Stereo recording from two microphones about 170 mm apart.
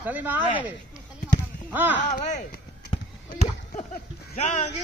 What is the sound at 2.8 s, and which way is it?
Horse, 30° left (ahead or behind).